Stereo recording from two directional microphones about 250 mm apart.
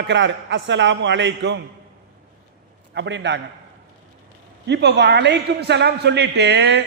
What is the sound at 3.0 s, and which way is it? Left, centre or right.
Speech, right.